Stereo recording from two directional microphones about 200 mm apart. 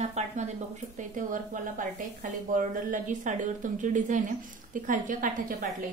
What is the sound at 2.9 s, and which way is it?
A woman's voice, 40° right (ahead or behind).